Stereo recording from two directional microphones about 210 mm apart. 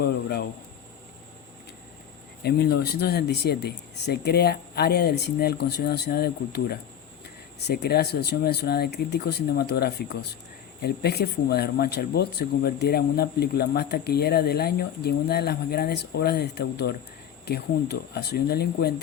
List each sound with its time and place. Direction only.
0.0 s speech: 50° left (ahead or behind)
2.4 s speech: 50° left (ahead or behind)